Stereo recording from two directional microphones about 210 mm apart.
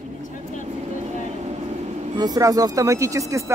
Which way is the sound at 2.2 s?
15° right (ahead or behind).